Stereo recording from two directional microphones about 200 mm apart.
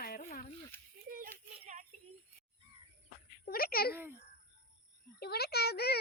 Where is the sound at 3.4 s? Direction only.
50° left (ahead or behind).